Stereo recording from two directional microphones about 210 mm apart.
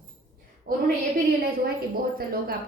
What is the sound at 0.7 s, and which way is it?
A woman's voice, 45° right (ahead or behind).